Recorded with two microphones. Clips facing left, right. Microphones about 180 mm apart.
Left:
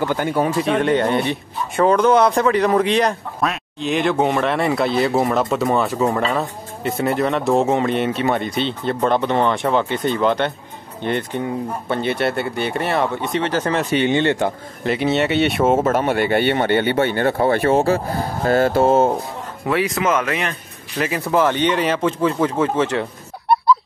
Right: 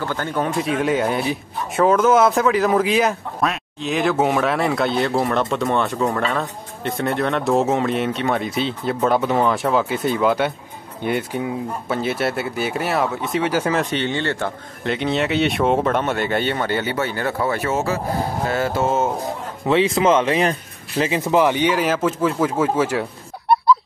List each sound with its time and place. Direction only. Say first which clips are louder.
0.0 s a man's voice: left 4 dB; 15° left (ahead or behind); by 13.8 s 5° right (ahead or behind)
13.8 s speech: left 5 dB; 15° left (ahead or behind)
14.8 s a man's voice: left 3 dB; 5° left (ahead or behind)
16.5 s speech: left 5 dB; 25° left (ahead or behind)
19.7 s speech: right 3 dB; 25° right (ahead or behind)
21.0 s speech: right 1 dB; 20° right (ahead or behind)
23.5 s chicken: even; centre (ahead or behind)